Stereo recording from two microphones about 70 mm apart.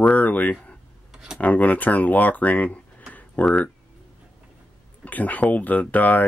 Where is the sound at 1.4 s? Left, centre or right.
Left.